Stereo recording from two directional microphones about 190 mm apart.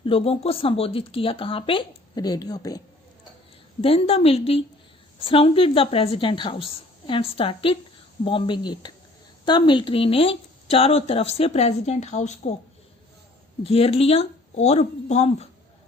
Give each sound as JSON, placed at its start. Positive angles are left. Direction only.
{"t": 0.0, "sound": "speech", "side_deg": 30}
{"t": 3.8, "sound": "speech", "side_deg": 30}
{"t": 13.7, "sound": "speech", "side_deg": 30}